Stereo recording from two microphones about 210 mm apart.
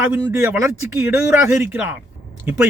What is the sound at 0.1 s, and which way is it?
Speech, 10° right (ahead or behind).